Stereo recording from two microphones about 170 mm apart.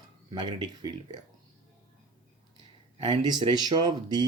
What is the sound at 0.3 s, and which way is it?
Speech, 25° right (ahead or behind).